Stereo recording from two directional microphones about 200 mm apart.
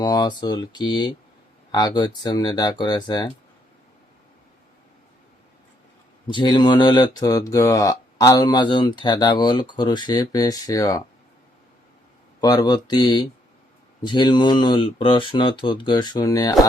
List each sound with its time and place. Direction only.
0.0 s speech: 20° left (ahead or behind)
6.2 s speech: 20° left (ahead or behind)
12.4 s speech: 20° left (ahead or behind)